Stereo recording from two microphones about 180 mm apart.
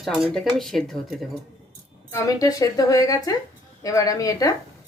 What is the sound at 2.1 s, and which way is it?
A woman's voice, 20° left (ahead or behind).